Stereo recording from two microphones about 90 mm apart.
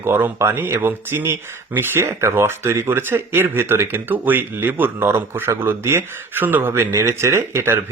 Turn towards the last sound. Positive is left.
turn(degrees=-30)  # may be behind; listen again after turning